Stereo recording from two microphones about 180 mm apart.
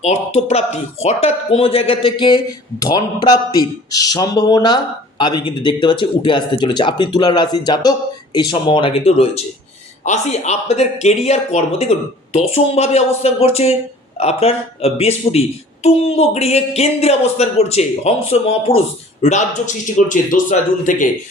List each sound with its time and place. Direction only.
0.0 s a man's voice: 40° left (ahead or behind)